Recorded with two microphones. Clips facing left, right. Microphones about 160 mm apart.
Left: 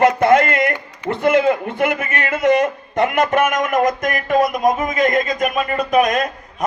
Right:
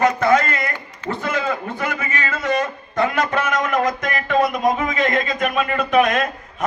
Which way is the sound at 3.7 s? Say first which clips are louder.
Left 3 dB; 45° left (ahead or behind).